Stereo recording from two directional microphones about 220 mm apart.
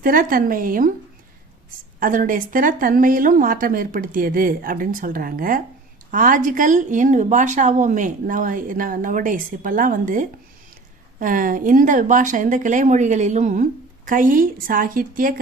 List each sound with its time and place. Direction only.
0.0 s speech: 40° right (ahead or behind)
2.0 s speech: 40° right (ahead or behind)